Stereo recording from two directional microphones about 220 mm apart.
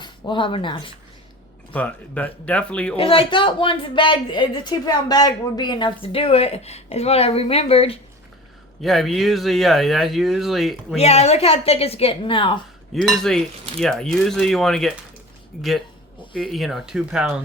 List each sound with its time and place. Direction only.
0.0 s speech: 20° left (ahead or behind)
1.7 s speech: 5° left (ahead or behind)
2.9 s speech: 25° left (ahead or behind)
8.8 s speech: centre (ahead or behind)
10.9 s speech: 30° left (ahead or behind)
12.9 s speech: centre (ahead or behind)